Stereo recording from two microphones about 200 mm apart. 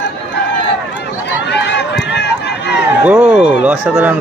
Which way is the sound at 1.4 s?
60° left (ahead or behind).